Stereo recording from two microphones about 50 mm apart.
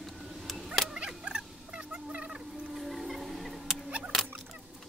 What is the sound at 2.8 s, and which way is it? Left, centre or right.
Music, centre.